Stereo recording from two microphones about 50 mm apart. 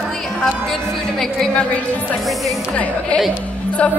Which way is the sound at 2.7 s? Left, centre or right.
Left.